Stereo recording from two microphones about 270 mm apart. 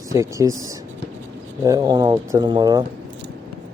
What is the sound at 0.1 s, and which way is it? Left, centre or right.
Speech, centre.